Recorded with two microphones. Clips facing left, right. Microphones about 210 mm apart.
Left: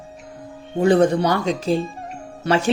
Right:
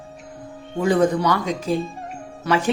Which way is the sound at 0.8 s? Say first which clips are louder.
Left 3 dB; 30° left (ahead or behind).